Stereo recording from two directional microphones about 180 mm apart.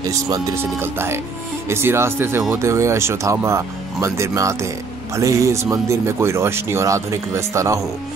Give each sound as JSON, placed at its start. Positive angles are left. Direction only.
{"t": 0.0, "sound": "speech", "side_deg": -15}